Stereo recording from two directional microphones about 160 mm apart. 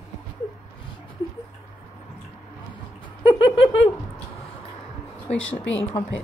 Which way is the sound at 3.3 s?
35° left (ahead or behind).